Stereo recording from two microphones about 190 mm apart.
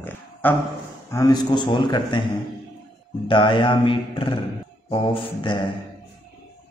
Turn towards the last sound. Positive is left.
turn(degrees=25)  # may be behind; listen again after turning